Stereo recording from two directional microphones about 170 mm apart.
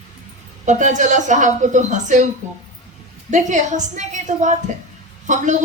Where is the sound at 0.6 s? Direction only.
45° right (ahead or behind).